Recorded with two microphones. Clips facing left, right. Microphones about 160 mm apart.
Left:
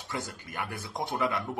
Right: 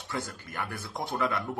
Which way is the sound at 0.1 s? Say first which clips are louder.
Right 1 dB; 15° left (ahead or behind).